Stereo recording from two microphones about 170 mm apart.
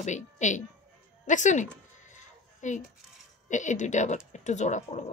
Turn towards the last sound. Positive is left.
turn(degrees=45)  # may be behind; listen again after turning